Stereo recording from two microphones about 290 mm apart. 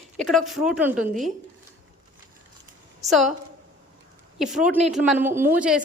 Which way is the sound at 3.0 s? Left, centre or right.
Centre.